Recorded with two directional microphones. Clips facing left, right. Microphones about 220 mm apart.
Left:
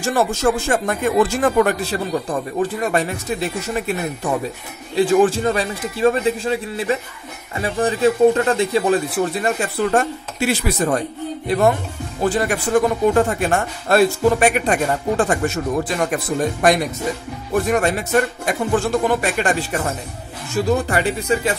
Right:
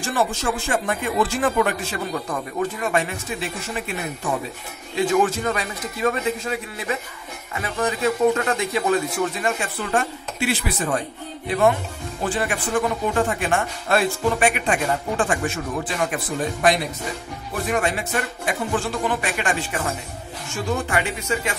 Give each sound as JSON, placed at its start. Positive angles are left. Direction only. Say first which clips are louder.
{"t": 0.0, "sound": "speech", "louder": "left 6 dB", "side_deg": 40}
{"t": 17.6, "sound": "speech", "louder": "left 1 dB", "side_deg": 40}